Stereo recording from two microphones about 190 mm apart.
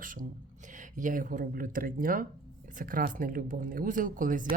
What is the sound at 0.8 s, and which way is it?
Speech, 40° right (ahead or behind).